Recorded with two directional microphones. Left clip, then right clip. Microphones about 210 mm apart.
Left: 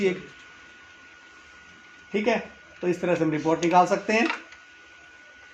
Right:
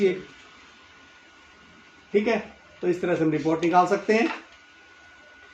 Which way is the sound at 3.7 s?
15° left (ahead or behind).